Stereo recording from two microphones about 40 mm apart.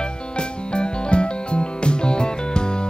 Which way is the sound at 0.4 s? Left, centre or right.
Left.